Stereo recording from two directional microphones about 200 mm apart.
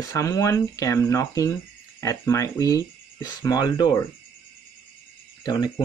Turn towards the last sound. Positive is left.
turn(degrees=20)  # may be behind; listen again after turning